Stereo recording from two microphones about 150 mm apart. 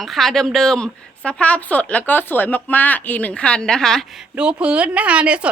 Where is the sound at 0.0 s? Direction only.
Centre (ahead or behind).